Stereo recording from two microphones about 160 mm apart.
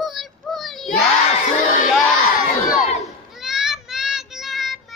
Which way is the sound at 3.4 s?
Centre (ahead or behind).